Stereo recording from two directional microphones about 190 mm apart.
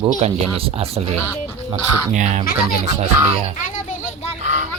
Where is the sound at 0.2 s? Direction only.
30° right (ahead or behind).